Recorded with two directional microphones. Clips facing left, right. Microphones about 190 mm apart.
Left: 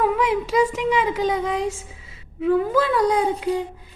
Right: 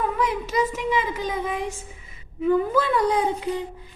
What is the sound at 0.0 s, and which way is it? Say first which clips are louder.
A woman's voice: left 4 dB; 90° left.